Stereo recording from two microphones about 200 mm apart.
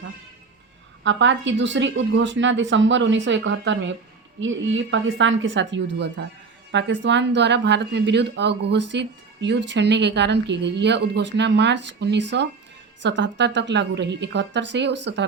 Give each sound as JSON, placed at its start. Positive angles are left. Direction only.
{"t": 1.0, "sound": "a woman's voice", "side_deg": -65}